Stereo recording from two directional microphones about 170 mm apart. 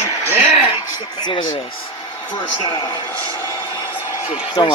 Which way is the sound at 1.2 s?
25° left (ahead or behind).